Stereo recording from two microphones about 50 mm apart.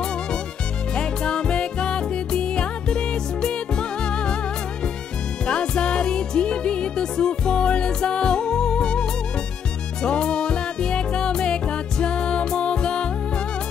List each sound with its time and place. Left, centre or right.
0.9 s music: centre
5.5 s music: centre
10.0 s music: centre